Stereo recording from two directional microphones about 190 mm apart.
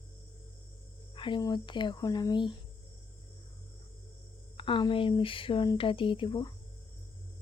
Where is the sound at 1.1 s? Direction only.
25° left (ahead or behind).